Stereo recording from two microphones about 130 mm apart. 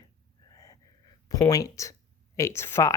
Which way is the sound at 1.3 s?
25° left (ahead or behind).